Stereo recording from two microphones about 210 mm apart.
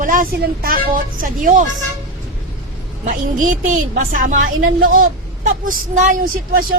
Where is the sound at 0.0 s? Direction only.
40° right (ahead or behind).